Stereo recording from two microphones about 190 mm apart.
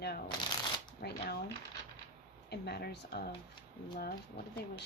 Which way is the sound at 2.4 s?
60° left (ahead or behind).